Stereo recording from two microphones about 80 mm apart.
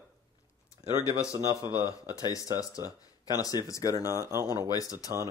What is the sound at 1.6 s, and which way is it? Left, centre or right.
Speech, left.